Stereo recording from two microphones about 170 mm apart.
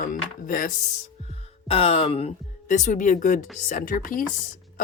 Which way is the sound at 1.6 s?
35° left (ahead or behind).